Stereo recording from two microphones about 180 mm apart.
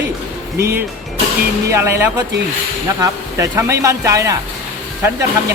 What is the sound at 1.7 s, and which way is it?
Speech, 15° right (ahead or behind).